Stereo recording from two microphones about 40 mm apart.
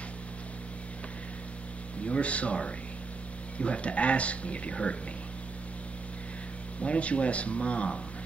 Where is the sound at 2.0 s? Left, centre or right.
Left.